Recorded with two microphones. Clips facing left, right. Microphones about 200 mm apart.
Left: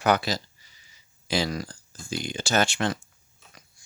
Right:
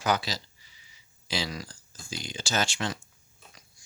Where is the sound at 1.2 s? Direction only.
50° left (ahead or behind).